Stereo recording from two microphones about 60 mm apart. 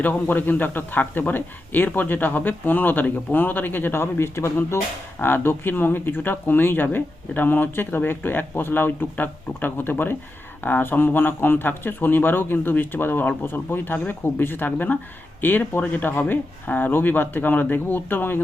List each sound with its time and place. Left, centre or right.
0.0 s speech: left
5.2 s speech: left